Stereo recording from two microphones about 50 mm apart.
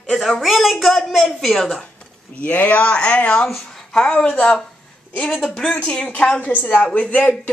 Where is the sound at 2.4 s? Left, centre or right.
Left.